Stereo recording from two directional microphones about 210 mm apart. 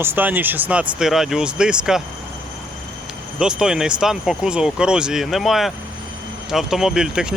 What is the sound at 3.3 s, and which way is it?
Speech, 5° right (ahead or behind).